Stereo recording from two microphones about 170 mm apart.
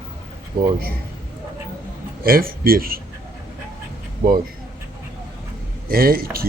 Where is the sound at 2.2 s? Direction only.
60° right (ahead or behind).